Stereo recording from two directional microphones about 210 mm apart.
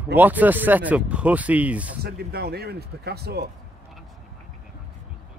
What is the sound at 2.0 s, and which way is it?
Speech, 50° right (ahead or behind).